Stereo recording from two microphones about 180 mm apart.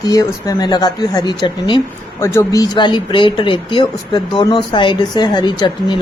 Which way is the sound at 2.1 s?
15° left (ahead or behind).